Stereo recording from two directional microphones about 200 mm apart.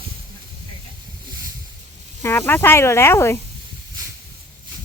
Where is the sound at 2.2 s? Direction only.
10° left (ahead or behind).